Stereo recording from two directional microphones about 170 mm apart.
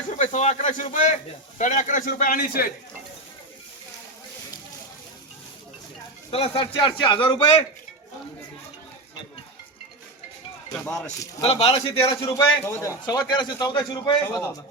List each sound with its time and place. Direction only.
0.2 s a man's voice: 45° left (ahead or behind)
6.3 s a man's voice: 30° left (ahead or behind)
11.4 s speech: 35° left (ahead or behind)
12.0 s a man's voice: 20° left (ahead or behind)